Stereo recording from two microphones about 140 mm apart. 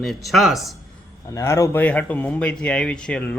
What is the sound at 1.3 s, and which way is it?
Speech, 20° left (ahead or behind).